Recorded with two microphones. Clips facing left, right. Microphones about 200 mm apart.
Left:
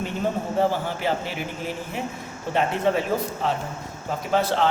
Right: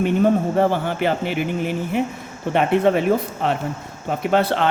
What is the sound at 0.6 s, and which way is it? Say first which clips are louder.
A woman's voice: right 4 dB; 60° right (ahead or behind).